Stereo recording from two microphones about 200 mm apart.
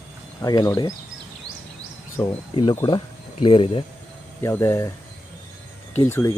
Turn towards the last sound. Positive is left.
turn(degrees=10)  # may be behind; listen again after turning